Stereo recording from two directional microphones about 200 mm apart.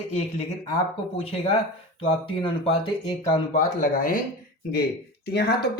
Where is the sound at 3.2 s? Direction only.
40° left (ahead or behind).